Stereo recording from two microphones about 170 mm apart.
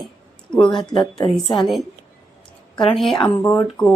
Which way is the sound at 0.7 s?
25° left (ahead or behind).